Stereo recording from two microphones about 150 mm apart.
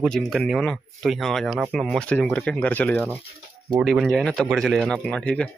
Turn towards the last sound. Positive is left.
turn(degrees=5)  # may be behind; listen again after turning